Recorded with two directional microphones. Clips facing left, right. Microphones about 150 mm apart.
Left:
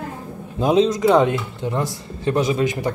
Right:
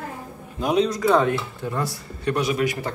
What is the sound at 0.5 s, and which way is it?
Speech, 25° left (ahead or behind).